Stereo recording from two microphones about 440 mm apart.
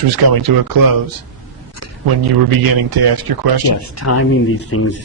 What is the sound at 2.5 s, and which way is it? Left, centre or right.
A man's voice, right.